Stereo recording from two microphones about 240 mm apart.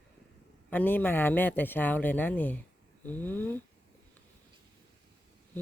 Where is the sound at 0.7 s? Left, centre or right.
Centre.